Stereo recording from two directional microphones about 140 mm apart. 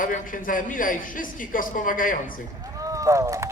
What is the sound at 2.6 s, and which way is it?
Run, 25° right (ahead or behind).